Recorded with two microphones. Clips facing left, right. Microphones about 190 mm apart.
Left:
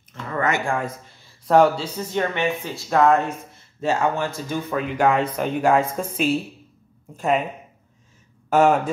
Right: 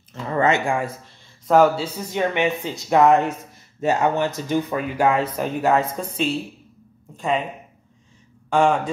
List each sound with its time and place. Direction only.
0.1 s a sound: 30° right (ahead or behind)
0.7 s a man's voice: centre (ahead or behind)
2.0 s speech: 15° right (ahead or behind); by 7.4 s 5° left (ahead or behind)
8.5 s speech: 5° left (ahead or behind)